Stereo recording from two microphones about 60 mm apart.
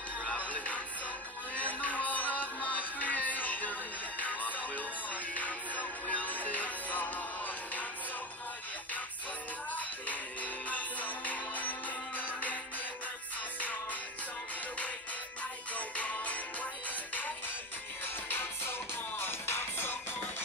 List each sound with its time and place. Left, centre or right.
1.5 s music: left
9.8 s music: left
15.7 s music: left
18.0 s music: left